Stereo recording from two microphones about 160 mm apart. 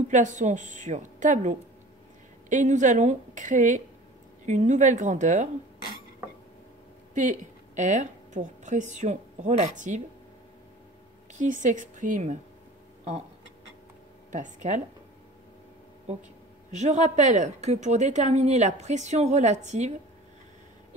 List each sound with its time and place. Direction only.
0.1 s a woman's voice: 50° right (ahead or behind)
7.2 s speech: 50° right (ahead or behind)
11.3 s a woman's voice: 55° right (ahead or behind)
14.3 s a woman's voice: 50° right (ahead or behind)
16.7 s a woman's voice: 45° right (ahead or behind)